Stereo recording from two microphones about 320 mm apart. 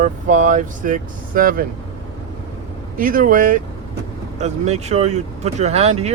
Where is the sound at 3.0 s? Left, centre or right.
Right.